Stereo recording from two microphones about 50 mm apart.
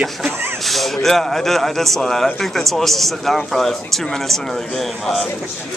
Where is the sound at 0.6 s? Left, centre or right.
Centre.